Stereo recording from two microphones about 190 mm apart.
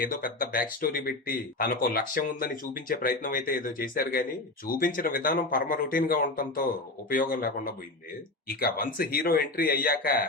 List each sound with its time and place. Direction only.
0.0 s speech: 45° left (ahead or behind)